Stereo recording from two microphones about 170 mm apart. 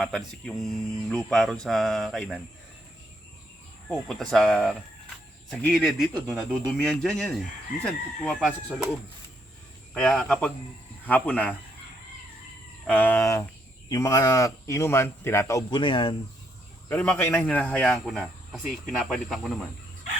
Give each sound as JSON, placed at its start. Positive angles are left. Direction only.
{"t": 0.0, "sound": "speech", "side_deg": 0}
{"t": 3.8, "sound": "speech", "side_deg": 5}
{"t": 9.9, "sound": "speech", "side_deg": 5}
{"t": 12.9, "sound": "speech", "side_deg": 10}
{"t": 16.9, "sound": "speech", "side_deg": 10}